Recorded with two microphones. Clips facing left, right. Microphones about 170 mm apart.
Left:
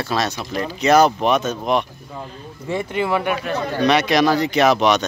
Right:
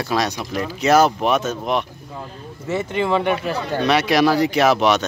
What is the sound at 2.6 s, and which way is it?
Speech, 10° left (ahead or behind).